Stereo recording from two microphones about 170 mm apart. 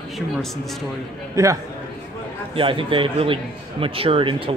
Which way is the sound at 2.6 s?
30° right (ahead or behind).